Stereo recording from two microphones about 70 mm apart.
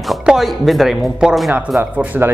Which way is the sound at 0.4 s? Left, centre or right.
Centre.